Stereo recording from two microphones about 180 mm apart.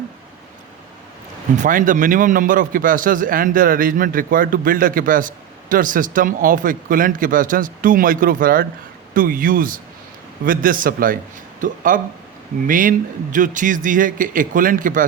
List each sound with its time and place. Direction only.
1.5 s a man's voice: 45° right (ahead or behind)